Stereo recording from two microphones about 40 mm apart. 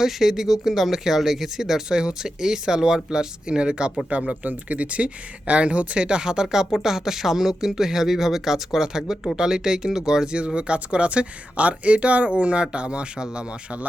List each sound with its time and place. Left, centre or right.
0.0 s speech: centre
4.4 s speech: right; by 10.4 s centre
10.4 s speech: right